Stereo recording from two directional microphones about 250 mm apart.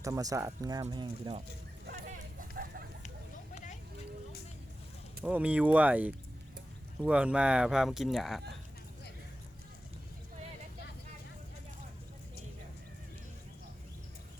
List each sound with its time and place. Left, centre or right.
0.0 s speech: centre
1.9 s a sound: right
5.2 s speech: centre